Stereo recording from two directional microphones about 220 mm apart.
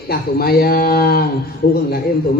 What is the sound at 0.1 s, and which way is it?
A man's voice, 45° left (ahead or behind).